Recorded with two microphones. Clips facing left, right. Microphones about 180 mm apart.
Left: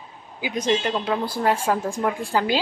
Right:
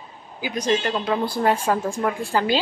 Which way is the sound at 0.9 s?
10° left (ahead or behind).